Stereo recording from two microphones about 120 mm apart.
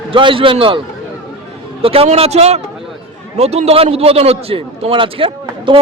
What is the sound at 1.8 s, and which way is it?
A man's voice, 50° right (ahead or behind).